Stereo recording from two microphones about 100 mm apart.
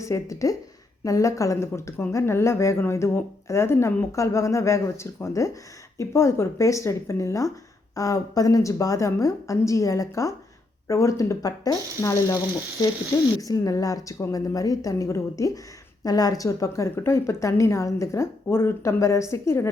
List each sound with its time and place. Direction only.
0.0 s a woman's voice: 30° left (ahead or behind)
13.4 s a woman's voice: 35° left (ahead or behind)